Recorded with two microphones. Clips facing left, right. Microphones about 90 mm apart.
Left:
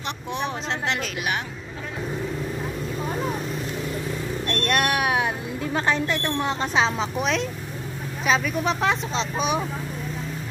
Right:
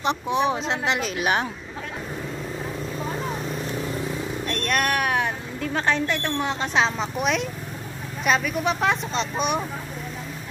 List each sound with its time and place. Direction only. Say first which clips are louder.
0.0 s speech: right 7 dB; 15° right (ahead or behind)
4.5 s speech: left 1 dB; centre (ahead or behind)